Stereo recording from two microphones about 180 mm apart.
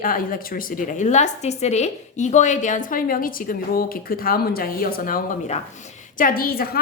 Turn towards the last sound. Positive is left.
turn(degrees=55)  # may be behind; listen again after turning